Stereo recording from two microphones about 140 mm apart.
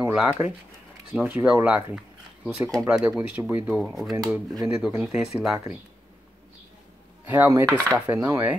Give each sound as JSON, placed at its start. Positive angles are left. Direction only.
{"t": 0.0, "sound": "speech", "side_deg": -5}
{"t": 5.3, "sound": "speech", "side_deg": 0}
{"t": 7.2, "sound": "speech", "side_deg": -15}